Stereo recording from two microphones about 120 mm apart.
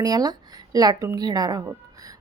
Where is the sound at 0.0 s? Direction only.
35° right (ahead or behind).